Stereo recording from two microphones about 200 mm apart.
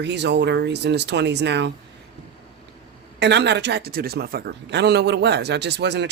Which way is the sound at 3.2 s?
60° right (ahead or behind).